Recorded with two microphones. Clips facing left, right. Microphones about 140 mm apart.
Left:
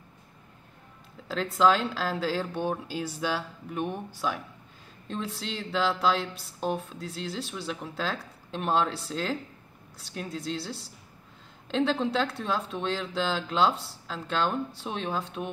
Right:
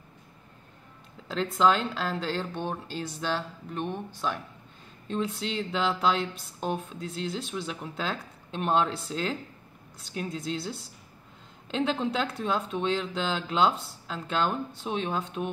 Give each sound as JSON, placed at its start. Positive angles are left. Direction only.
{"t": 1.3, "sound": "speech", "side_deg": 0}